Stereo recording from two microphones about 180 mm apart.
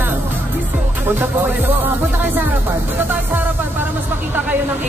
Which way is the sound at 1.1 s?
10° right (ahead or behind).